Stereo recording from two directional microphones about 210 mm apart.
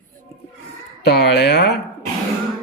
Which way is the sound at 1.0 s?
50° left (ahead or behind).